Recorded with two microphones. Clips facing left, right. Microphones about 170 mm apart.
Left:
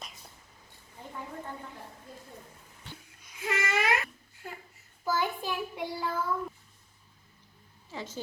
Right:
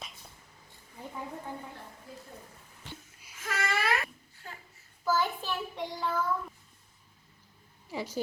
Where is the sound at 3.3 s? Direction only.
15° left (ahead or behind).